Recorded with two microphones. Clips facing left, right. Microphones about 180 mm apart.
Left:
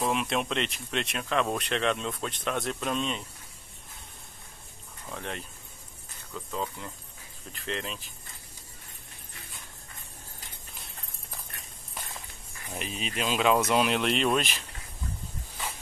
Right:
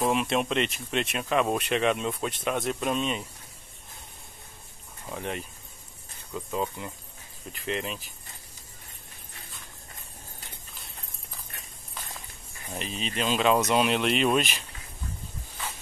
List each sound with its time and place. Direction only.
0.0 s speech: centre (ahead or behind)
5.1 s speech: 10° right (ahead or behind)
12.7 s speech: 10° left (ahead or behind)